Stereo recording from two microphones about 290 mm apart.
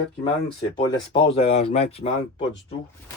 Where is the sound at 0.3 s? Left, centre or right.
Centre.